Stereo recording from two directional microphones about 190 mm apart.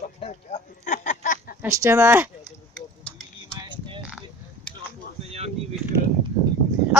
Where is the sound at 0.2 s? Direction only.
40° left (ahead or behind).